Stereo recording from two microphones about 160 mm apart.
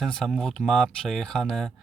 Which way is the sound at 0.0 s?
Centre (ahead or behind).